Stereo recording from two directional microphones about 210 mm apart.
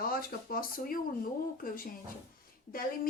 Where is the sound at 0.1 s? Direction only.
45° left (ahead or behind).